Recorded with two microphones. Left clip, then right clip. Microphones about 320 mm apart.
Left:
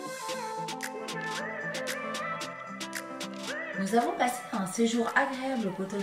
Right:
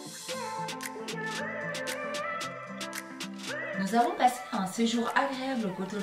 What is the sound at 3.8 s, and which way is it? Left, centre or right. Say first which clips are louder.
Speech: right 2 dB; centre.